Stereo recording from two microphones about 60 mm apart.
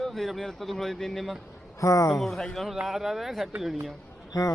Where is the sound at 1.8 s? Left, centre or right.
Left.